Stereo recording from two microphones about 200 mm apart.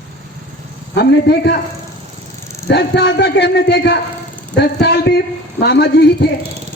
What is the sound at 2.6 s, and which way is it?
A man's voice, 60° left (ahead or behind).